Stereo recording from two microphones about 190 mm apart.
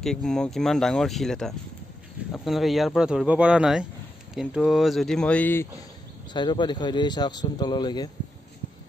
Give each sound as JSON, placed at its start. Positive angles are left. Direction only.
{"t": 0.0, "sound": "speech", "side_deg": 0}
{"t": 6.3, "sound": "a man's voice", "side_deg": 25}